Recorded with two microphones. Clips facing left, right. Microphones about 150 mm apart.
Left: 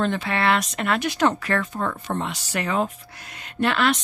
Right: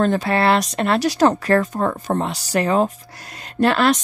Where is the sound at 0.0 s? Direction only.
40° right (ahead or behind).